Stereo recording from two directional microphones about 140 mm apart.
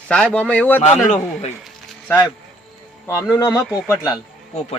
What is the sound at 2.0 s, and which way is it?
Speech, 15° left (ahead or behind).